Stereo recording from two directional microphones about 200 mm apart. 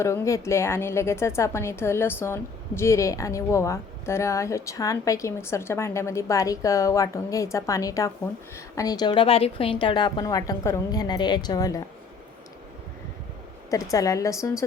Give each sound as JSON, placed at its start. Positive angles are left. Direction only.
{"t": 0.0, "sound": "a woman's voice", "side_deg": 15}
{"t": 13.9, "sound": "a woman's voice", "side_deg": 15}